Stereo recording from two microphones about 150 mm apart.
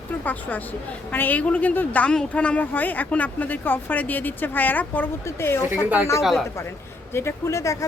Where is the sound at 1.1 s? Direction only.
10° left (ahead or behind).